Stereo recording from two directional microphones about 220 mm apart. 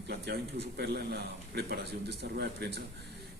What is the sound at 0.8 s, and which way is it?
Speech, 45° right (ahead or behind).